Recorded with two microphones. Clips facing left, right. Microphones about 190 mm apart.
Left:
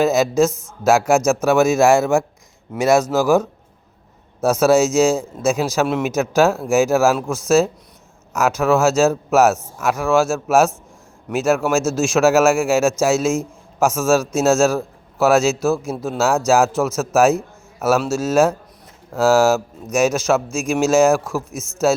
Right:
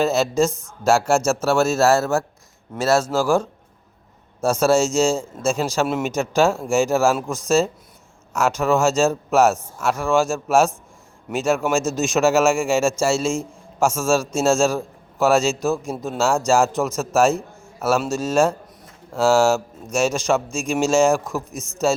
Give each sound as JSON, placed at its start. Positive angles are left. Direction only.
{"t": 0.0, "sound": "a man's voice", "side_deg": 10}
{"t": 5.1, "sound": "a man's voice", "side_deg": 10}